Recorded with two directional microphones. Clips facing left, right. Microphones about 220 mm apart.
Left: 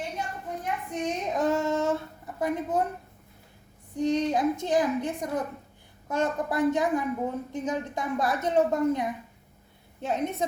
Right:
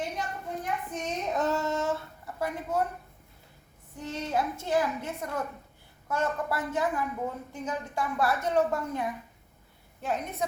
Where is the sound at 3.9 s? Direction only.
20° left (ahead or behind).